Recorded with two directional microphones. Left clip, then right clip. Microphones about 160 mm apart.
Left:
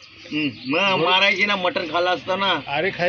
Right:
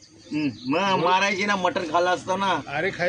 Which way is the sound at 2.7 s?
40° left (ahead or behind).